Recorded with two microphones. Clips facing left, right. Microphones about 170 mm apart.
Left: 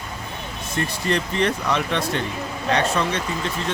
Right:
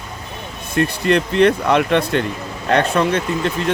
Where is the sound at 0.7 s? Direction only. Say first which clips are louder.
Right 7 dB; 65° right (ahead or behind).